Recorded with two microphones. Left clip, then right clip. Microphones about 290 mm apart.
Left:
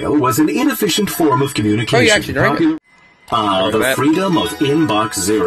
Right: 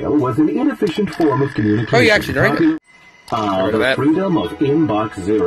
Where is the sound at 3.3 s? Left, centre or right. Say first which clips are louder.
Left 3 dB; left.